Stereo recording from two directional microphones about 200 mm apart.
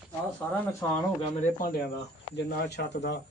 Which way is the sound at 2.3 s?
55° left (ahead or behind).